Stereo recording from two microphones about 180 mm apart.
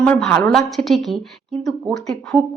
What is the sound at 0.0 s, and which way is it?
A woman's voice, 5° left (ahead or behind).